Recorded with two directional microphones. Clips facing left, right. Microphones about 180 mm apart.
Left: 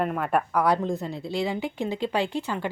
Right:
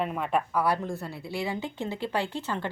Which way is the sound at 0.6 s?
15° left (ahead or behind).